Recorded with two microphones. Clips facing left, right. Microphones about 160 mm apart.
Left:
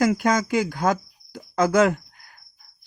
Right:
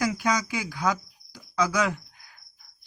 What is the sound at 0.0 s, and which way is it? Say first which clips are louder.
Speech: left 6 dB; 50° left (ahead or behind).